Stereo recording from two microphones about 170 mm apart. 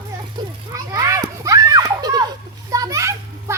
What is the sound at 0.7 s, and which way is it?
Children playing, 20° right (ahead or behind).